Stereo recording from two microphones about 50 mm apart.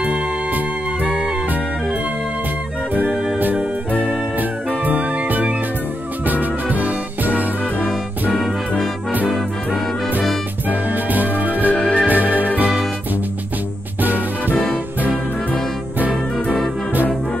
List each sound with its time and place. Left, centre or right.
0.0 s music: right
4.8 s music: right
10.7 s music: right